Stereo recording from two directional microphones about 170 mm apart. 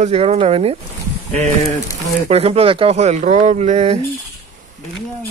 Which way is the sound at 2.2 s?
35° right (ahead or behind).